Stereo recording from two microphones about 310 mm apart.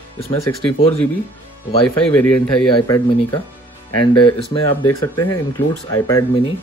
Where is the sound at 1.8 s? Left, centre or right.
Centre.